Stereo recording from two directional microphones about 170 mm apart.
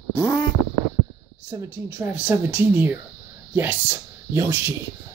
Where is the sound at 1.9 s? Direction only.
10° right (ahead or behind).